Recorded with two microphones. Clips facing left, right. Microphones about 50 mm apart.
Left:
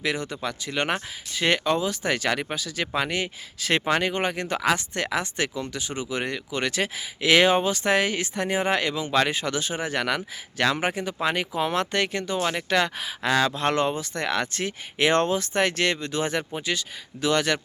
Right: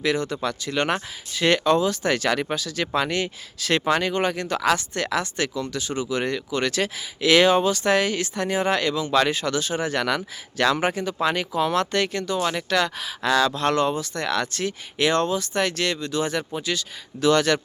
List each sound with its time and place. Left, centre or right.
0.0 s speech: centre